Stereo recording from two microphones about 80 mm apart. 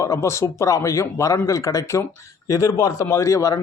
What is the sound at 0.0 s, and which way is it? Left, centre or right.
A man's voice, left.